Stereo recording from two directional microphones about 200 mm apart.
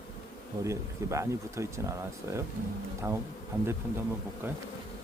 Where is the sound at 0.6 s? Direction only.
15° right (ahead or behind).